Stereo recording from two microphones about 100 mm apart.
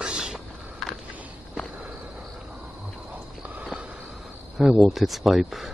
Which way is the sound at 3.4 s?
15° right (ahead or behind).